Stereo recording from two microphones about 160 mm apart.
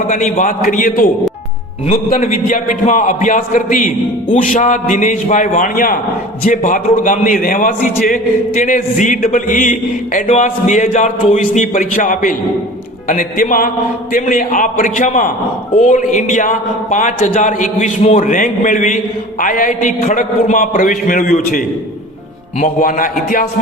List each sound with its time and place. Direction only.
0.1 s a man's voice: 50° left (ahead or behind)
2.1 s a man's voice: 50° left (ahead or behind)
18.2 s a man's voice: 55° left (ahead or behind)